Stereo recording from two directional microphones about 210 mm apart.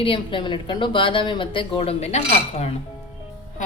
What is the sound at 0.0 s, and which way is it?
Speech, 25° left (ahead or behind).